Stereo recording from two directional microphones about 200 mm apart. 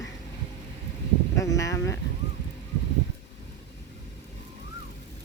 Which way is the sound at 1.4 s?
15° left (ahead or behind).